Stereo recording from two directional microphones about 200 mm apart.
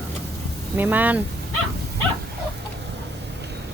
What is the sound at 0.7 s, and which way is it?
Speech, 10° right (ahead or behind).